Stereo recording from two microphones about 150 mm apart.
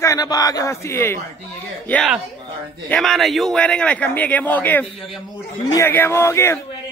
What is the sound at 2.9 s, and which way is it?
A man's voice, 5° left (ahead or behind).